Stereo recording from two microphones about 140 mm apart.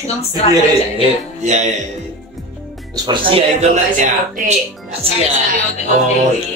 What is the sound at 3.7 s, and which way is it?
Speech, 60° right (ahead or behind).